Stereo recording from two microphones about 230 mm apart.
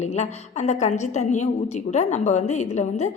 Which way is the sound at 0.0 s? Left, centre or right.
Left.